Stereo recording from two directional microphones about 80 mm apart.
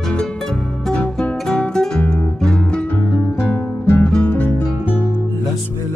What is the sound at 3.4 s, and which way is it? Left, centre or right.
Music, left.